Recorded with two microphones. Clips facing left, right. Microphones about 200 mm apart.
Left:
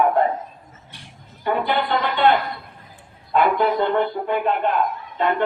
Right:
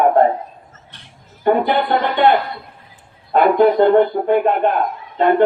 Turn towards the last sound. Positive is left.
turn(degrees=-45)  # may be behind; listen again after turning